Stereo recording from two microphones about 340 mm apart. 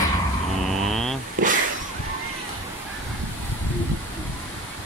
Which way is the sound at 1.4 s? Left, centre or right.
Right.